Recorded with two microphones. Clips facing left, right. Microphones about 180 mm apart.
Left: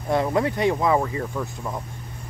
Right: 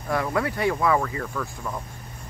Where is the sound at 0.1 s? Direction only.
25° left (ahead or behind).